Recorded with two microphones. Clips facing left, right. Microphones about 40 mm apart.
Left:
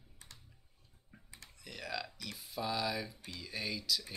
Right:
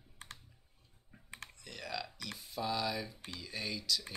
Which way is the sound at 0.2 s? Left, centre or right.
Right.